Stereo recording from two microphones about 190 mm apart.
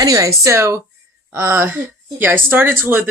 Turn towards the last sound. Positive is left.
turn(degrees=-10)  # may be behind; listen again after turning